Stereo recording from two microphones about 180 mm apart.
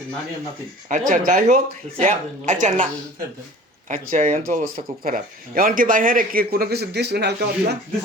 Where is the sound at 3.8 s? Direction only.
45° right (ahead or behind); by 7.8 s 65° right (ahead or behind).